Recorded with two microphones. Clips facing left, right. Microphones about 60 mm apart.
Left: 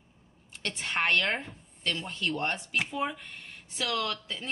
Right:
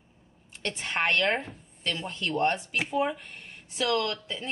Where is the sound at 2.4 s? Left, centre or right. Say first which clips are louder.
Right 4 dB; centre.